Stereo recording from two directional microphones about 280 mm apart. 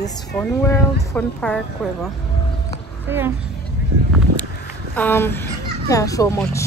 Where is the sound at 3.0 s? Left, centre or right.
Centre.